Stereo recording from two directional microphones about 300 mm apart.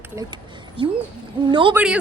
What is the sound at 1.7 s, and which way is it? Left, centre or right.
Speech, centre.